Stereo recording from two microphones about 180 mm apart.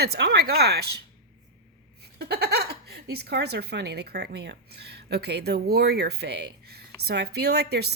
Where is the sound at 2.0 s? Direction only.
65° right (ahead or behind).